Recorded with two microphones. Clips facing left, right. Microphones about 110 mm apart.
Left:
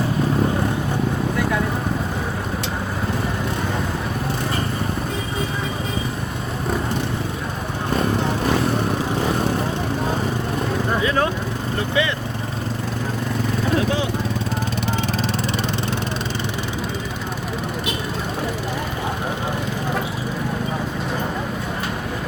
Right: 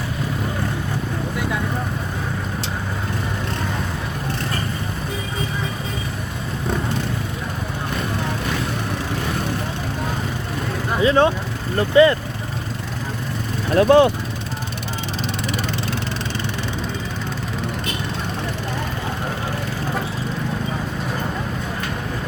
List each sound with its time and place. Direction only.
11.0 s vehicle: 25° right (ahead or behind)
12.0 s vehicle: 40° right (ahead or behind)
13.7 s speech: 55° right (ahead or behind)